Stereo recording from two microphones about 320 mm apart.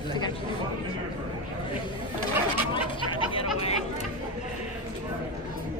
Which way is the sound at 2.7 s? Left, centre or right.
Centre.